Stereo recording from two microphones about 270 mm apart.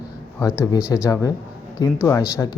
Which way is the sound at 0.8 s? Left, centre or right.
Centre.